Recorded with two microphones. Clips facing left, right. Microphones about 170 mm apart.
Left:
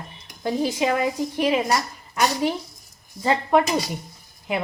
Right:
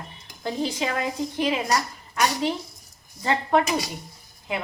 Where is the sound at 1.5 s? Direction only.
20° left (ahead or behind).